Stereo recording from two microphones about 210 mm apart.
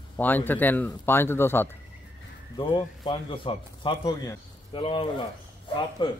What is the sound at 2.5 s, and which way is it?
Speech, 20° left (ahead or behind).